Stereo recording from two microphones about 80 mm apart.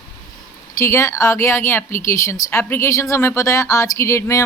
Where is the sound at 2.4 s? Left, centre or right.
Left.